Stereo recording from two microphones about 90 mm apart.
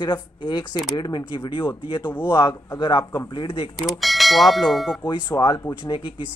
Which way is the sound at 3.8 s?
Centre (ahead or behind).